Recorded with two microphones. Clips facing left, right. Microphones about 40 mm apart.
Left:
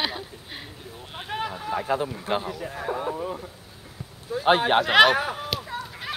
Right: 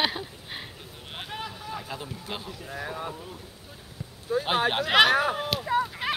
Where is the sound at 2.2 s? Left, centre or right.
Left.